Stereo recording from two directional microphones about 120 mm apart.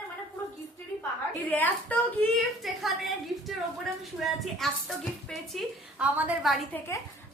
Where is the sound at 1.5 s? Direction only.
15° left (ahead or behind).